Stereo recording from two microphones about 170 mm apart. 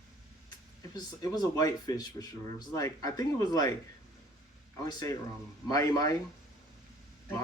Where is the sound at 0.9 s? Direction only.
20° left (ahead or behind).